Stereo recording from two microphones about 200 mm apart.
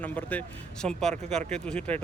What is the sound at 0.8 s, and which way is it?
Speech, 30° right (ahead or behind).